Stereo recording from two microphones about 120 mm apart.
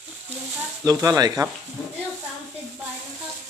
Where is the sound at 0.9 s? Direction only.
30° right (ahead or behind).